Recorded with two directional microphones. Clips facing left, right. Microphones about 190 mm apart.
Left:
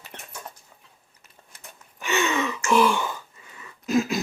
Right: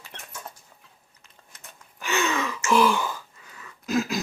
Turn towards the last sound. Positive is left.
turn(degrees=0)  # may be behind; listen again after turning